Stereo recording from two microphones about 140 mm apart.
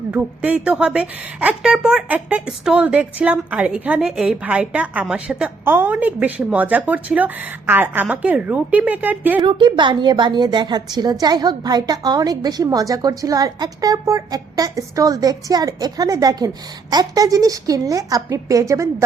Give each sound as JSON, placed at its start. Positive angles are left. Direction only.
{"t": 0.1, "sound": "a woman's voice", "side_deg": -10}
{"t": 9.4, "sound": "a woman's voice", "side_deg": -35}